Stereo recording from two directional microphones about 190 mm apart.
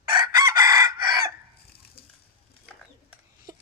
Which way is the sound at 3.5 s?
20° right (ahead or behind).